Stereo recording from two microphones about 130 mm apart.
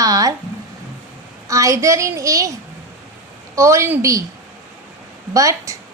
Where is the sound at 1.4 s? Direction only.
25° right (ahead or behind).